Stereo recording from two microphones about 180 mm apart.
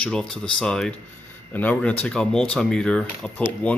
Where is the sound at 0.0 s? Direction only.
5° left (ahead or behind).